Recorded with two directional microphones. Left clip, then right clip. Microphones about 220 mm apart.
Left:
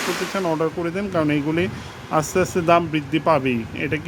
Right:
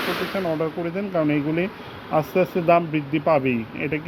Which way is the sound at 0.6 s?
20° left (ahead or behind).